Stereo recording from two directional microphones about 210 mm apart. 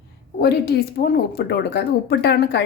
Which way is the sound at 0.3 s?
50° left (ahead or behind).